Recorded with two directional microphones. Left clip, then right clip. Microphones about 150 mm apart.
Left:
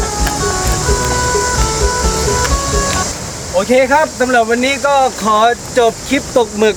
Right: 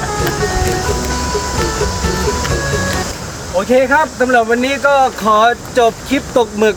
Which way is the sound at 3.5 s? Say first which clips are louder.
Left 1 dB; 10° left (ahead or behind).